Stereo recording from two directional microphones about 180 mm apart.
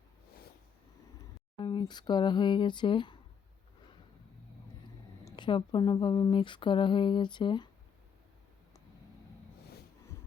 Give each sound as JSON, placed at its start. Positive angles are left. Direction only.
{"t": 1.5, "sound": "speech", "side_deg": 25}
{"t": 5.2, "sound": "speech", "side_deg": 25}